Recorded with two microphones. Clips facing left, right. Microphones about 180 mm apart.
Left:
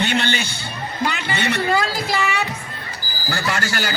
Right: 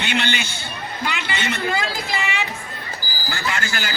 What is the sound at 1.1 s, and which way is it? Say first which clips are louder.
Speech: left 2 dB; 45° left (ahead or behind).